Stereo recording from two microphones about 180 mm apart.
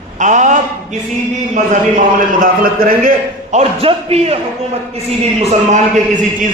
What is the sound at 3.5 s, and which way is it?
A man's voice, 35° right (ahead or behind).